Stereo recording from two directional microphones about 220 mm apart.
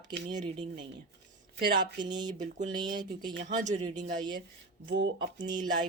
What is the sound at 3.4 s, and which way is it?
Speech, 35° right (ahead or behind).